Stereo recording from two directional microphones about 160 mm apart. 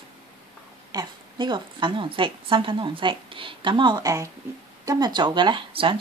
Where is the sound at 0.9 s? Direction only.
25° right (ahead or behind).